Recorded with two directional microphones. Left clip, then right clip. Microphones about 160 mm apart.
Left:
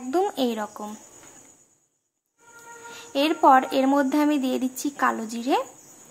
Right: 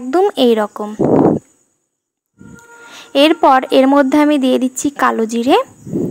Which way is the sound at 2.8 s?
45° right (ahead or behind).